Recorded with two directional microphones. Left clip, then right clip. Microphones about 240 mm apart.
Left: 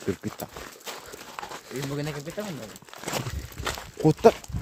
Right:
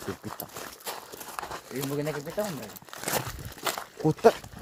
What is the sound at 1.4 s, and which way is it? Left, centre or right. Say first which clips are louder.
Crumpling: even; right.